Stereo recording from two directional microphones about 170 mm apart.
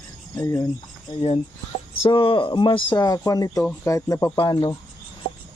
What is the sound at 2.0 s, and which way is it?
Speech, 30° left (ahead or behind).